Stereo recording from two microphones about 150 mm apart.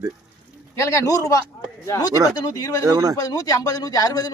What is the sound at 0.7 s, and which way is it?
Speech, 20° left (ahead or behind).